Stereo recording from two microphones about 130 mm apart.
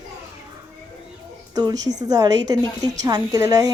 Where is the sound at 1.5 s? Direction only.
30° right (ahead or behind).